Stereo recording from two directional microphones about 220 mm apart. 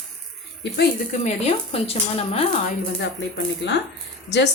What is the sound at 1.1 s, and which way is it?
Speech, 30° left (ahead or behind).